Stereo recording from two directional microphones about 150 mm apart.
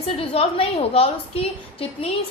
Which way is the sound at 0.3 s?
40° left (ahead or behind).